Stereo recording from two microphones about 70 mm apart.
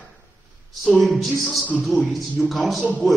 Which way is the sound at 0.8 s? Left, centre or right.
Centre.